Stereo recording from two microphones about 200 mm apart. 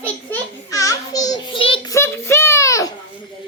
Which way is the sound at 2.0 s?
10° left (ahead or behind).